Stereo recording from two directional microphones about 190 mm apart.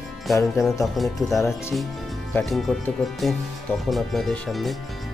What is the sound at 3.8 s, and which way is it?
Speech, centre (ahead or behind).